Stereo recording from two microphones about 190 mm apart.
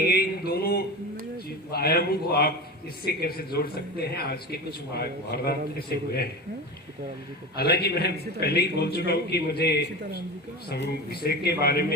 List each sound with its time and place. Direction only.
0.1 s a sound: 55° left (ahead or behind)
1.7 s speech: 55° left (ahead or behind)
7.5 s speech: 55° left (ahead or behind)